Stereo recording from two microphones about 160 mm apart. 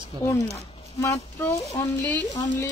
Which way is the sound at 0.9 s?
20° left (ahead or behind).